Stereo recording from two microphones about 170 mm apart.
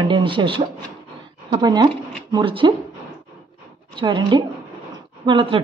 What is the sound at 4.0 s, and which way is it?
Speech, 30° right (ahead or behind).